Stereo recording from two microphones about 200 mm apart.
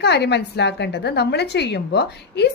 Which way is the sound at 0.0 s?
55° left (ahead or behind).